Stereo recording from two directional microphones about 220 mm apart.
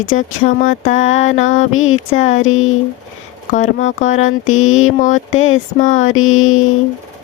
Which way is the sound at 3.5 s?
35° left (ahead or behind).